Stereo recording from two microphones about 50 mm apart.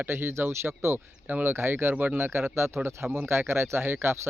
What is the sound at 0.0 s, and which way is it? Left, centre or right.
Speech, right.